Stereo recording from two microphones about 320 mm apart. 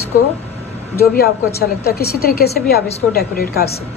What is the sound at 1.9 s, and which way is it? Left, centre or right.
A woman's voice, left.